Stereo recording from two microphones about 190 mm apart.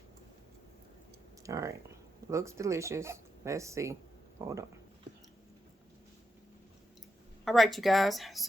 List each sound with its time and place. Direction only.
1.5 s speech: 15° right (ahead or behind)
7.4 s speech: centre (ahead or behind)